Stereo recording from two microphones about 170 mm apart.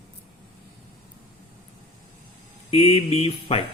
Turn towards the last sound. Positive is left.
turn(degrees=35)  # may be behind; listen again after turning